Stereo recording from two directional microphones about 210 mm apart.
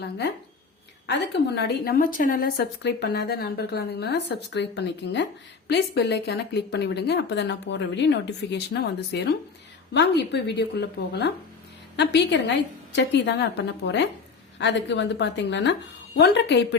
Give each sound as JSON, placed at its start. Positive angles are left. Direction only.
{"t": 1.0, "sound": "a woman's voice", "side_deg": 55}